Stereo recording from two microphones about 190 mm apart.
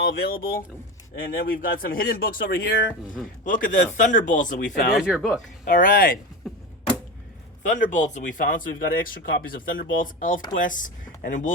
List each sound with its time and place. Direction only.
0.0 s a man's voice: 60° left (ahead or behind)
4.9 s speech: 5° right (ahead or behind)
5.6 s speech: 45° left (ahead or behind)
6.4 s a sound: centre (ahead or behind)
7.7 s speech: 40° left (ahead or behind)